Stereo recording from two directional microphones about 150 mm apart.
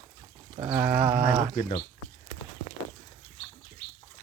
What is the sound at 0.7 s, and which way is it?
Speech, 10° right (ahead or behind).